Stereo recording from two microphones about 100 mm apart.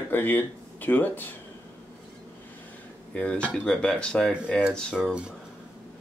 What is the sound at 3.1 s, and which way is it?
Speech, 10° left (ahead or behind).